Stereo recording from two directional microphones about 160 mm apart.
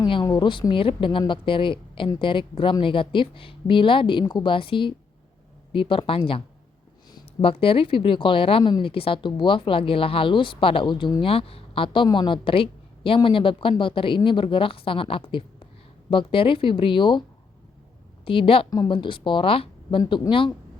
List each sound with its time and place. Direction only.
0.0 s a woman's voice: 25° left (ahead or behind)
18.3 s speech: 35° left (ahead or behind)